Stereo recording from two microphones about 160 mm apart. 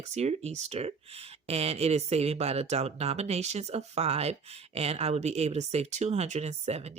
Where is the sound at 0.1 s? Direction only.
45° right (ahead or behind).